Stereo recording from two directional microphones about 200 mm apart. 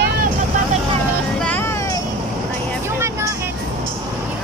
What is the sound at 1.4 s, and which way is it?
Vehicle, 10° left (ahead or behind).